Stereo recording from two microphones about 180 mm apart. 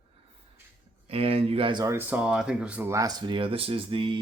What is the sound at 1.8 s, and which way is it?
Speech, 10° right (ahead or behind).